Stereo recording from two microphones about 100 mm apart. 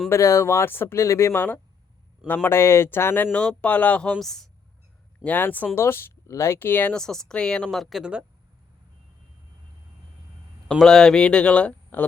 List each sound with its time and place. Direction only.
0.1 s speech: 30° left (ahead or behind)
3.3 s speech: 10° left (ahead or behind)
4.2 s speech: 5° left (ahead or behind)
5.2 s speech: 15° left (ahead or behind)
6.9 s speech: 5° left (ahead or behind)
10.8 s speech: 5° left (ahead or behind)